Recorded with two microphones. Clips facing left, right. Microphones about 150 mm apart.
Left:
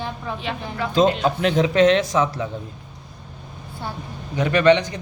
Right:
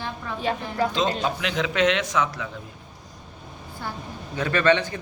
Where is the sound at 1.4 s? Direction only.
35° left (ahead or behind).